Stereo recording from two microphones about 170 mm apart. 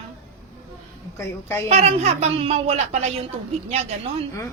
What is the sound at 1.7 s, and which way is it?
A woman's voice, 40° right (ahead or behind).